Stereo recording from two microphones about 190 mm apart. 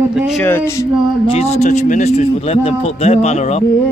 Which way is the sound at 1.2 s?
35° left (ahead or behind).